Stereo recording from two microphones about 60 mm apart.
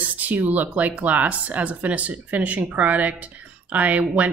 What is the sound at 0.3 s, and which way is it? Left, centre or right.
Speech, right.